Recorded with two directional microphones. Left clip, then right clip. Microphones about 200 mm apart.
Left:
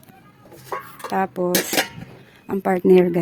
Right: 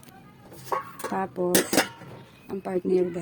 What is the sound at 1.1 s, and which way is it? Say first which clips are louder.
Speech: left 5 dB; 15° left (ahead or behind).